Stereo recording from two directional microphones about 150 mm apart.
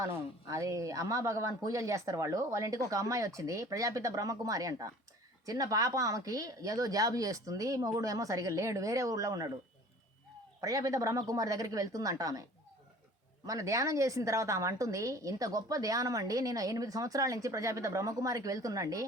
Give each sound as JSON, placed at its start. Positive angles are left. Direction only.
{"t": 0.0, "sound": "a woman's voice", "side_deg": -20}
{"t": 10.6, "sound": "a woman's voice", "side_deg": -20}